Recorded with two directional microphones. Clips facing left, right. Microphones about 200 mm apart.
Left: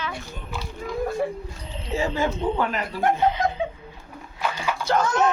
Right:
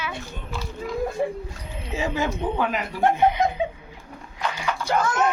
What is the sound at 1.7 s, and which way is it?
Speech, 10° right (ahead or behind).